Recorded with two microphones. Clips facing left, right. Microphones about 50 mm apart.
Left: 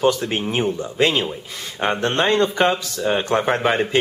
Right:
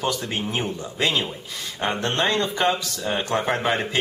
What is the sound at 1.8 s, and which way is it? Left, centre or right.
Speech, left.